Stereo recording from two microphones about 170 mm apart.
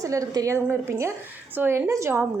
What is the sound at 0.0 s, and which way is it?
A woman's voice, 20° right (ahead or behind).